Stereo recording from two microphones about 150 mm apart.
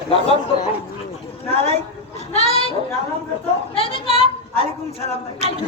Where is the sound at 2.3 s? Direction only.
45° left (ahead or behind).